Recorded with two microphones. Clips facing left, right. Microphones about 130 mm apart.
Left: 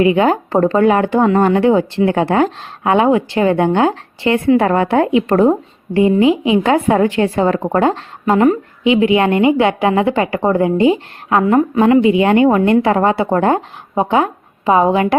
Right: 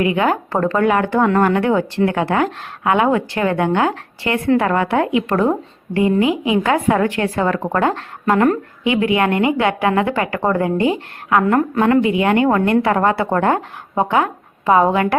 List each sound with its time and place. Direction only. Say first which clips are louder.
0.0 s speech: left 4 dB; 25° left (ahead or behind)